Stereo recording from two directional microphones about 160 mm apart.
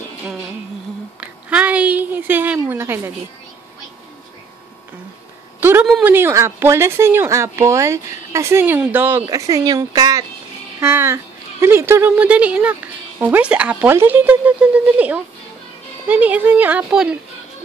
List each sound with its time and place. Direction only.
1.2 s a sound: 5° right (ahead or behind)
2.7 s speech: 15° right (ahead or behind)
5.6 s a woman's voice: 10° right (ahead or behind)